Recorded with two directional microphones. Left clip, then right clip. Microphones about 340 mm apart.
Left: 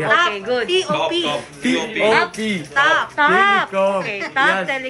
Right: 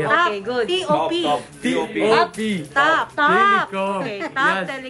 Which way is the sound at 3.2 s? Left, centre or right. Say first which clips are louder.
Left 1 dB; centre.